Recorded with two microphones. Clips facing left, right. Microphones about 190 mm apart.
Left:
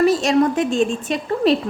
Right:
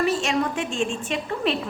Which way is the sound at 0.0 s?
35° left (ahead or behind).